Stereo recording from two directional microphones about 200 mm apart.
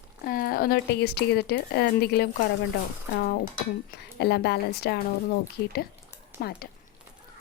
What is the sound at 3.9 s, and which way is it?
Speech, 55° left (ahead or behind).